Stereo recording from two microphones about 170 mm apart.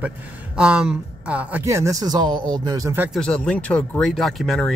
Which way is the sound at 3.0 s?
5° left (ahead or behind).